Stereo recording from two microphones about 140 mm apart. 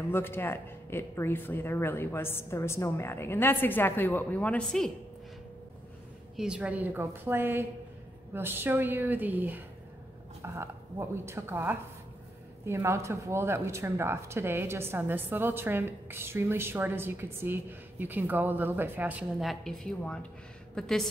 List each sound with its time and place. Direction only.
0.1 s speech: 15° left (ahead or behind)
6.3 s speech: 5° right (ahead or behind)
19.4 s a woman's voice: centre (ahead or behind)